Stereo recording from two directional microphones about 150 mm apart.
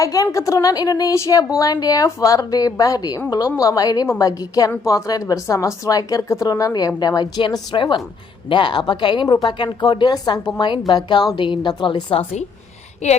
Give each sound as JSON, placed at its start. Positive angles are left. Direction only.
{"t": 0.0, "sound": "a woman's voice", "side_deg": 25}
{"t": 13.0, "sound": "speech", "side_deg": 50}